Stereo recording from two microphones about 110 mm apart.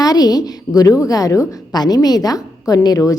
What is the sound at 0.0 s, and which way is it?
A woman's voice, 35° left (ahead or behind).